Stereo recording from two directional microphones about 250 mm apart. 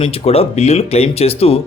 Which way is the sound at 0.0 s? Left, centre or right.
Left.